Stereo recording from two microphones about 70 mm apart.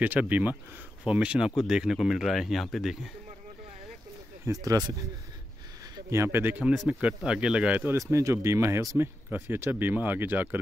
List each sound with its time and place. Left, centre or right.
0.0 s speech: right; by 3.1 s centre
4.6 s speech: right
6.0 s speech: right
6.9 s a man's voice: centre
8.0 s speech: right